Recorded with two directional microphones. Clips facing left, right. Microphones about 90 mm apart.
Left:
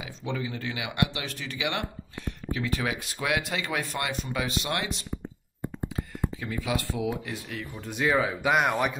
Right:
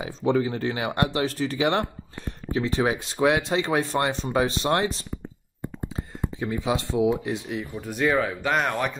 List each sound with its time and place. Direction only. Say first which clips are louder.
0.0 s speech: right 10 dB; 40° right (ahead or behind); by 7.6 s 20° right (ahead or behind)
7.7 s speech: right 2 dB; centre (ahead or behind)